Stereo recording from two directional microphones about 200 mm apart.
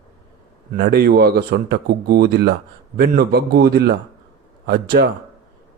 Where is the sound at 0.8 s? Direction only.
50° right (ahead or behind).